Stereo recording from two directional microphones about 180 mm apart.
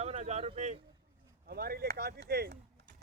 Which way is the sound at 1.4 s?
60° right (ahead or behind).